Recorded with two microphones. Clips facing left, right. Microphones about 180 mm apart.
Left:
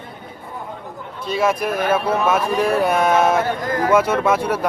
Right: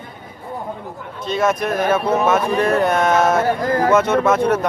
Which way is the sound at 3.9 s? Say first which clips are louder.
Right 2 dB; 10° left (ahead or behind).